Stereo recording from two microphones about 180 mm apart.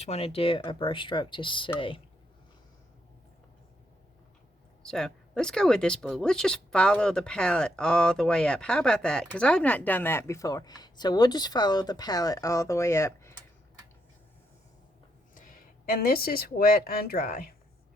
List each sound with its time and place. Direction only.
0.0 s speech: 35° left (ahead or behind)
4.8 s speech: 5° left (ahead or behind)
15.4 s speech: 50° left (ahead or behind)